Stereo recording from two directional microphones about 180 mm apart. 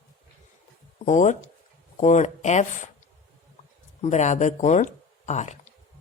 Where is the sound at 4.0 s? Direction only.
40° left (ahead or behind).